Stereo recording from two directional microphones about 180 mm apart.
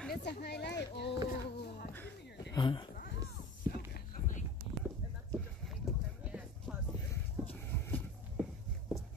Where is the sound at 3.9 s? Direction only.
50° left (ahead or behind).